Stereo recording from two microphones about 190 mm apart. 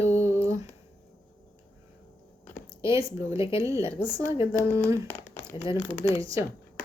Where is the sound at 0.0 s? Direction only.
15° right (ahead or behind).